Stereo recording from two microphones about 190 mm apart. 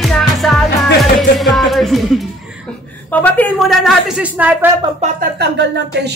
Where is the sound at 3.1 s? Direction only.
10° left (ahead or behind); by 4.5 s 10° right (ahead or behind).